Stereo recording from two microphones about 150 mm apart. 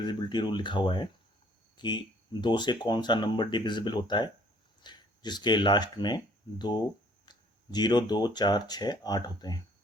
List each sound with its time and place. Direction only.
0.0 s speech: 30° left (ahead or behind)